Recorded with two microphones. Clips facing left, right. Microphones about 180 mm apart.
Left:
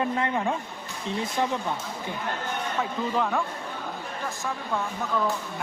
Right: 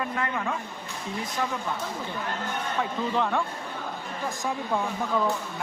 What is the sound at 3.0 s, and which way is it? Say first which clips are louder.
Speech: even; centre (ahead or behind).